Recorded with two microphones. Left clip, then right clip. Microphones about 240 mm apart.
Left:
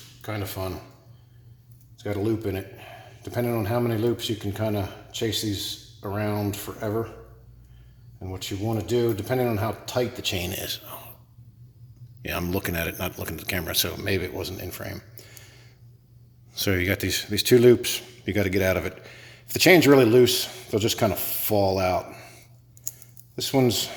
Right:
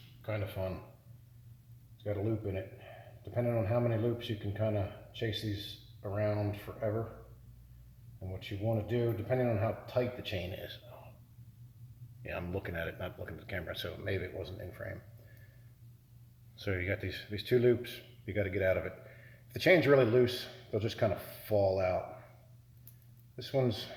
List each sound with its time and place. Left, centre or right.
0.2 s a man's voice: left
2.0 s a man's voice: left
8.2 s a man's voice: left
12.2 s a man's voice: left
16.6 s a man's voice: left
23.3 s a man's voice: left